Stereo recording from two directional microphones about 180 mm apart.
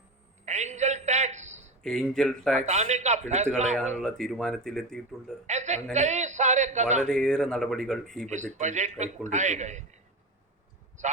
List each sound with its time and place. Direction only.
0.4 s a sound: 40° right (ahead or behind)
1.8 s speech: 5° left (ahead or behind)
2.6 s a man's voice: 40° right (ahead or behind)
4.0 s speech: 5° left (ahead or behind)
5.5 s a man's voice: 40° right (ahead or behind)
7.1 s speech: 5° left (ahead or behind)
8.3 s a man's voice: 40° right (ahead or behind)